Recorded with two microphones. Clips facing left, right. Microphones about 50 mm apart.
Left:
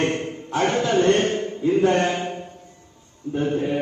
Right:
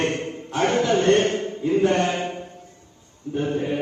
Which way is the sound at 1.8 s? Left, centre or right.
Left.